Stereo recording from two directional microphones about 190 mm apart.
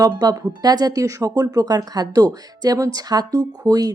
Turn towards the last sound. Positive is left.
turn(degrees=-20)  # may be behind; listen again after turning